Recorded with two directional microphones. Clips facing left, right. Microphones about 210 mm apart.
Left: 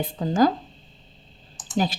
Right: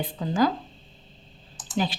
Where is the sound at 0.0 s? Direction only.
45° left (ahead or behind).